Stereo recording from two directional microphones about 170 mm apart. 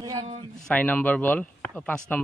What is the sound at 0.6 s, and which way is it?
Speech, 10° left (ahead or behind).